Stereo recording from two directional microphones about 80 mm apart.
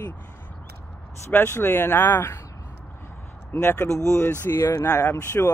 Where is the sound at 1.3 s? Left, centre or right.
Left.